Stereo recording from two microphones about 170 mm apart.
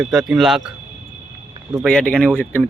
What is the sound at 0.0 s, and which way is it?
Speech, centre (ahead or behind).